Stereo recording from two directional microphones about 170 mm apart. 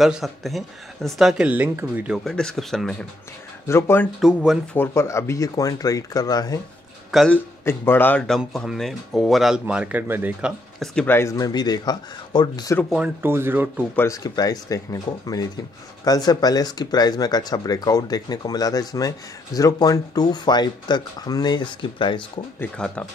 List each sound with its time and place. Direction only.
0.0 s speech: centre (ahead or behind)
2.2 s speech: centre (ahead or behind)
3.6 s speech: 15° left (ahead or behind)
4.2 s speech: 5° right (ahead or behind)
4.7 s speech: 15° left (ahead or behind)
7.1 s speech: centre (ahead or behind)
7.6 s speech: 15° left (ahead or behind); by 10.5 s 10° right (ahead or behind)
10.8 s speech: 10° left (ahead or behind); by 12.7 s 25° left (ahead or behind)
12.9 s speech: 10° right (ahead or behind)
13.9 s speech: 20° left (ahead or behind)
22.6 s speech: 5° left (ahead or behind)